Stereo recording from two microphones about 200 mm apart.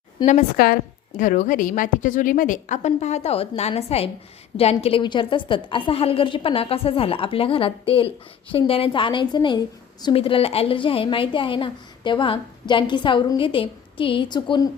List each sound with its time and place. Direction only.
0.3 s a woman's voice: 45° left (ahead or behind); by 14.7 s 20° left (ahead or behind)